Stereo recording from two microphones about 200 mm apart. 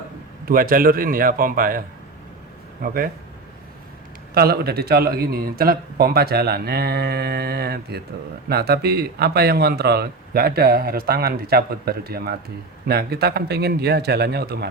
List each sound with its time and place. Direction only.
0.4 s speech: 45° right (ahead or behind)
2.8 s speech: 45° right (ahead or behind)
4.4 s speech: 50° right (ahead or behind)